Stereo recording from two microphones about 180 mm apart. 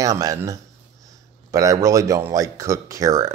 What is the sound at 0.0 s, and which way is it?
A man's voice, 20° right (ahead or behind).